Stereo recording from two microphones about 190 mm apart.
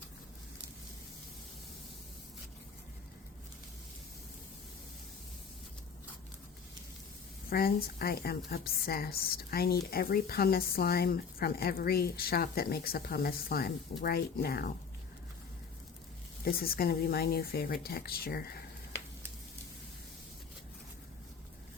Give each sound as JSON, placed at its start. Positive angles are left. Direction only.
{"t": 7.5, "sound": "speech", "side_deg": 50}
{"t": 16.4, "sound": "speech", "side_deg": 50}